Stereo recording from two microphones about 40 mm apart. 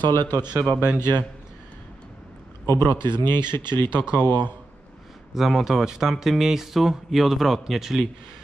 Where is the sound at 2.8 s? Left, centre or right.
Left.